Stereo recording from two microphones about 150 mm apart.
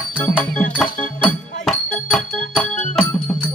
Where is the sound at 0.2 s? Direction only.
10° left (ahead or behind).